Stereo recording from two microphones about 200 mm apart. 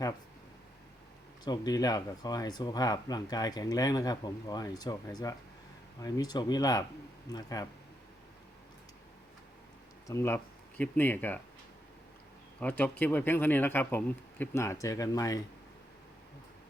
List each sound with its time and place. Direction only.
1.5 s speech: 20° left (ahead or behind)
10.1 s speech: 15° left (ahead or behind)
12.5 s speech: 10° left (ahead or behind)